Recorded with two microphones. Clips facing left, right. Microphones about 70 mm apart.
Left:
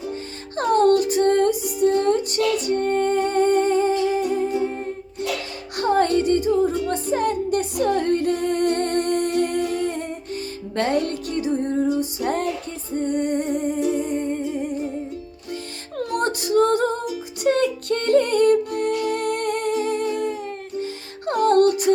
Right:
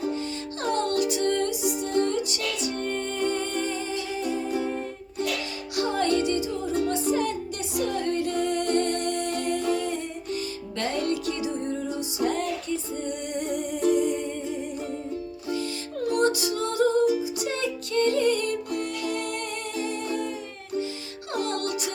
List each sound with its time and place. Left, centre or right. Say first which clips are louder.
0.1 s music: even; left
4.5 s music: left 4 dB; left
5.7 s music: left 6 dB; left
9.7 s humming: left 4 dB; left
10.8 s music: left 5 dB; left
13.9 s humming: left 1 dB; left
15.4 s music: right 4 dB; left